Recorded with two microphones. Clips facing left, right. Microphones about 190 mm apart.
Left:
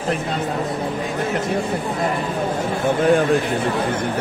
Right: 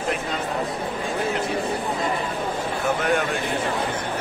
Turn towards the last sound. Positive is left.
turn(degrees=30)  # may be behind; listen again after turning